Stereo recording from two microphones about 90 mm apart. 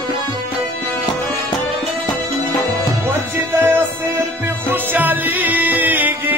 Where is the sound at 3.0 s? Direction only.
25° right (ahead or behind).